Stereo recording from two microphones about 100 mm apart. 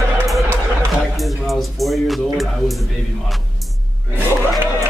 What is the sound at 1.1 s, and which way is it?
Speech, centre (ahead or behind).